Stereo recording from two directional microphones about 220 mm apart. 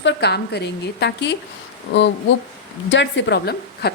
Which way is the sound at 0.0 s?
50° left (ahead or behind).